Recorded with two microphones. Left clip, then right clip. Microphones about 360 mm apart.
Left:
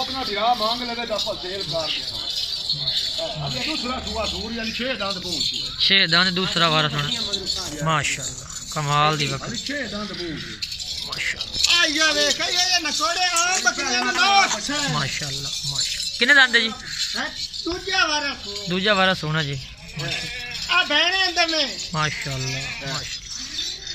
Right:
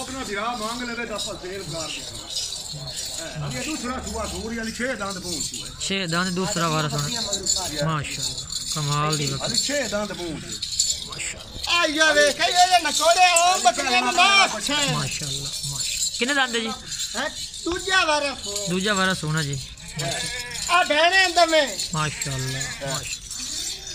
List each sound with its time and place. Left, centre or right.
4.8 s speech: centre
11.7 s a man's voice: right
13.2 s a man's voice: centre
16.2 s speech: centre
20.6 s rattle: right